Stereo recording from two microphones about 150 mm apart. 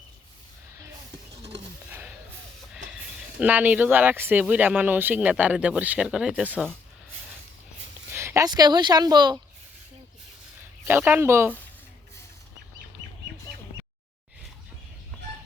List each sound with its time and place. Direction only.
1.9 s music: 10° right (ahead or behind)
3.4 s speech: 10° right (ahead or behind)
8.1 s speech: 15° right (ahead or behind)
10.8 s speech: 15° right (ahead or behind)